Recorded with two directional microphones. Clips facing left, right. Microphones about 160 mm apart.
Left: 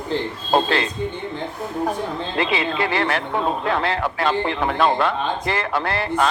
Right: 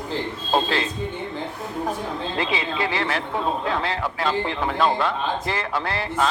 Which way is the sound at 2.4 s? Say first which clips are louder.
Left 5 dB; 65° left (ahead or behind).